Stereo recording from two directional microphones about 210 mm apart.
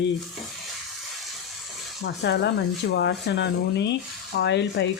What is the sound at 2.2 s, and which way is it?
Speech, 55° left (ahead or behind).